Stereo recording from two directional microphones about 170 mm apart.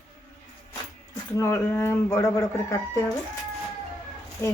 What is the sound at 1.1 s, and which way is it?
Speech, 15° left (ahead or behind).